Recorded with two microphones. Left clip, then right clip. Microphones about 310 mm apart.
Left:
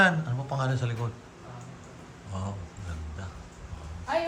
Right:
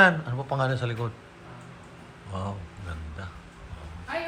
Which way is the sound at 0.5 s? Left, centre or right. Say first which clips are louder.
Right 4 dB; centre.